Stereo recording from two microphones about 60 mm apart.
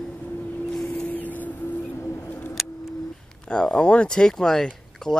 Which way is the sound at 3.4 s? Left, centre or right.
Centre.